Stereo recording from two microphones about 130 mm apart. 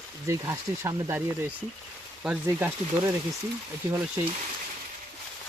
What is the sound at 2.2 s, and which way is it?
Speech, 10° right (ahead or behind).